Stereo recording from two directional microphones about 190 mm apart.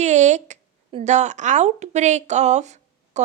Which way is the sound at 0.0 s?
40° right (ahead or behind).